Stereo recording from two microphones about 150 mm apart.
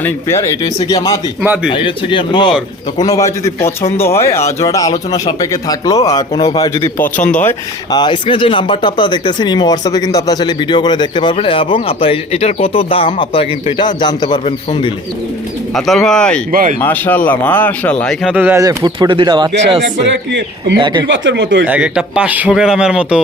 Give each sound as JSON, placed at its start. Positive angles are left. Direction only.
{"t": 0.0, "sound": "speech", "side_deg": 20}
{"t": 1.4, "sound": "speech", "side_deg": -10}
{"t": 1.7, "sound": "speech", "side_deg": 35}
{"t": 7.2, "sound": "speech", "side_deg": 5}
{"t": 7.9, "sound": "speech", "side_deg": 30}
{"t": 15.7, "sound": "speech", "side_deg": 5}
{"t": 16.5, "sound": "speech", "side_deg": -70}
{"t": 16.8, "sound": "speech", "side_deg": 10}
{"t": 18.3, "sound": "speech", "side_deg": -10}
{"t": 18.6, "sound": "speech", "side_deg": -25}
{"t": 21.6, "sound": "speech", "side_deg": -5}